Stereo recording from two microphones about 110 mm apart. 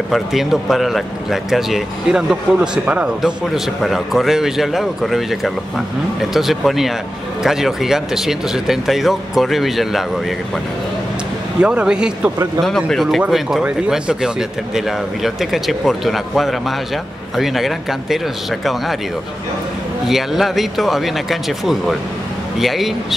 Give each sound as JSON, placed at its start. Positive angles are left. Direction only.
{"t": 0.1, "sound": "a man's voice", "side_deg": 0}
{"t": 11.6, "sound": "a man's voice", "side_deg": -10}
{"t": 12.6, "sound": "a man's voice", "side_deg": 5}
{"t": 20.1, "sound": "a man's voice", "side_deg": 0}